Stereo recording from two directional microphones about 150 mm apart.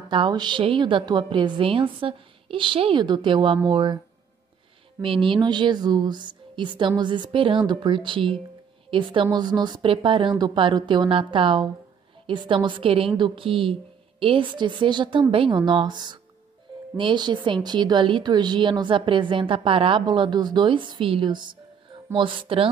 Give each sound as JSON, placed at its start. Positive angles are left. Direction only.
{"t": 0.1, "sound": "speech", "side_deg": -30}
{"t": 5.0, "sound": "speech", "side_deg": -35}